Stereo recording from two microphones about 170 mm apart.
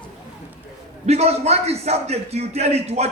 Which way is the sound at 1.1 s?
40° right (ahead or behind).